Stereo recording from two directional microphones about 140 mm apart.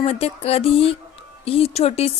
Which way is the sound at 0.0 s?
45° left (ahead or behind).